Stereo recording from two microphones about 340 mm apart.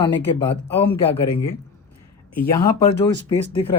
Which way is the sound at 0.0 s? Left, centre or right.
Centre.